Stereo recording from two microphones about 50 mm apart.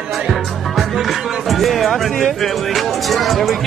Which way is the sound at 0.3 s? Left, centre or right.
Centre.